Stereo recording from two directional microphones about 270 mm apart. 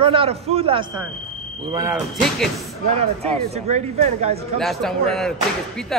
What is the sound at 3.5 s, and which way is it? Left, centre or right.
Speech, right.